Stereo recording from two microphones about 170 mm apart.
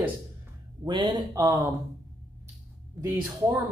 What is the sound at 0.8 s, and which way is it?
Speech, 30° right (ahead or behind).